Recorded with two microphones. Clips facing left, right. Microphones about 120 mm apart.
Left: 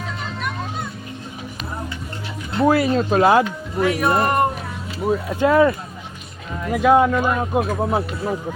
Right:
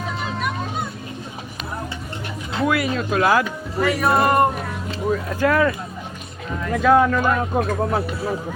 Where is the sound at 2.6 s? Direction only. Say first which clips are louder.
Left 5 dB; 30° left (ahead or behind).